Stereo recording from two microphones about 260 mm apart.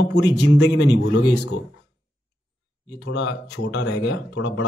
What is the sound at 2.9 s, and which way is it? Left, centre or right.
Speech, left.